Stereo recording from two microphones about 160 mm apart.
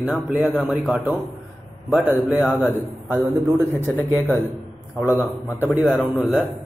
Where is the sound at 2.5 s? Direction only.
10° left (ahead or behind).